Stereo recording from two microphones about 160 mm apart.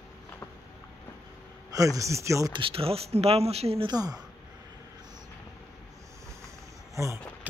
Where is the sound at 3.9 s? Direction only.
25° right (ahead or behind).